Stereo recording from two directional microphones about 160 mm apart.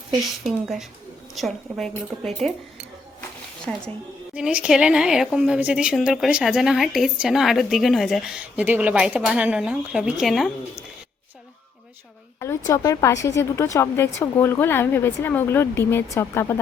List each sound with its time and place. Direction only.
0.4 s a woman's voice: centre (ahead or behind)
3.7 s a woman's voice: 5° left (ahead or behind)
4.4 s a woman's voice: 5° right (ahead or behind)
12.4 s a woman's voice: 20° left (ahead or behind)